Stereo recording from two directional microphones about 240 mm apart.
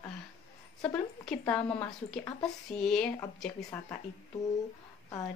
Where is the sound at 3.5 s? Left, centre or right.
Centre.